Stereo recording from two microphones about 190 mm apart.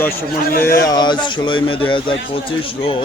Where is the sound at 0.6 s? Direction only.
20° left (ahead or behind).